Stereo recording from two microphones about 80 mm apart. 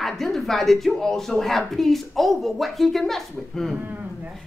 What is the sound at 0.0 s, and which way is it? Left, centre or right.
A woman's voice, centre.